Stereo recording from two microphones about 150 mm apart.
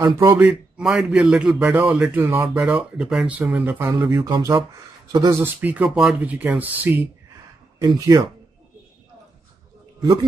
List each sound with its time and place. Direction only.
0.0 s a man's voice: 15° right (ahead or behind)
0.5 s a man's voice: 5° right (ahead or behind)
3.0 s a man's voice: 5° right (ahead or behind)
4.0 s speech: 30° right (ahead or behind)
5.4 s a man's voice: 10° right (ahead or behind)
7.8 s speech: 30° right (ahead or behind)